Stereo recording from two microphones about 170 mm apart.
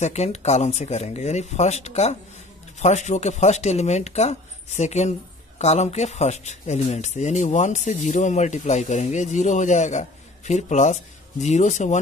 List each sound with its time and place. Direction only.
0.0 s speech: 40° left (ahead or behind)